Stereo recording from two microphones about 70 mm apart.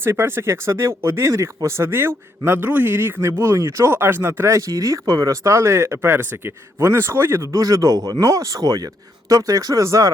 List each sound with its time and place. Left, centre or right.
0.0 s speech: right
7.4 s speech: right